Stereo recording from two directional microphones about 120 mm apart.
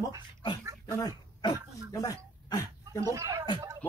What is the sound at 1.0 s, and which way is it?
Throat clearing, 35° left (ahead or behind).